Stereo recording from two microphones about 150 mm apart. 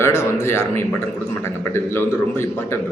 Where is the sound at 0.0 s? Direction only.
20° left (ahead or behind).